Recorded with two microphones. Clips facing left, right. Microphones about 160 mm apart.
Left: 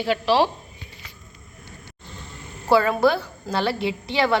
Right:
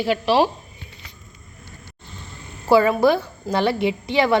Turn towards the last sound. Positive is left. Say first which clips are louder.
# right 3 dB
turn(degrees=-15)  # may be behind; listen again after turning